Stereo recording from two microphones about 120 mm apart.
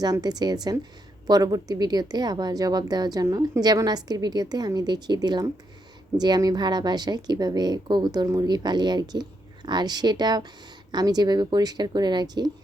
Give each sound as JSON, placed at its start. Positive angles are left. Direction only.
{"t": 0.0, "sound": "speech", "side_deg": -35}